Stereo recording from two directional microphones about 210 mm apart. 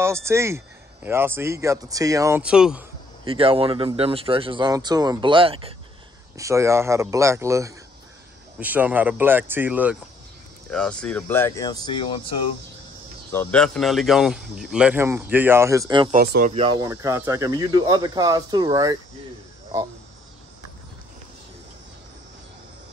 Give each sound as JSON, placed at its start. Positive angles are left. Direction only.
{"t": 0.0, "sound": "speech", "side_deg": -15}
{"t": 3.3, "sound": "speech", "side_deg": -25}
{"t": 6.3, "sound": "speech", "side_deg": -15}
{"t": 10.7, "sound": "speech", "side_deg": 5}
{"t": 13.3, "sound": "speech", "side_deg": 10}
{"t": 16.1, "sound": "speech", "side_deg": -40}
{"t": 16.5, "sound": "speech", "side_deg": -20}